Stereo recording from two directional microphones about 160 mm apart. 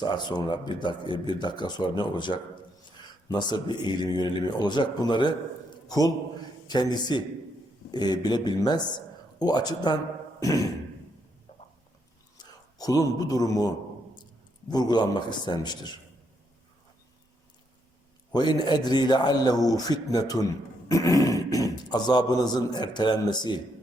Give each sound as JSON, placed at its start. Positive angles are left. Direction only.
{"t": 0.0, "sound": "a man's voice", "side_deg": 25}
{"t": 5.7, "sound": "a sound", "side_deg": 25}
{"t": 6.7, "sound": "a man's voice", "side_deg": 25}
{"t": 12.8, "sound": "a man's voice", "side_deg": 20}
{"t": 18.3, "sound": "a man's voice", "side_deg": 25}